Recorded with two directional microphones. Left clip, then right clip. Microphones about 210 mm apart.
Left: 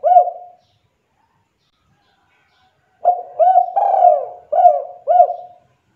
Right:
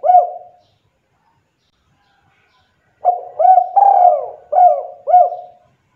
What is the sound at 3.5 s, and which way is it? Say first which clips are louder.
Bird: right 8 dB; 15° right (ahead or behind).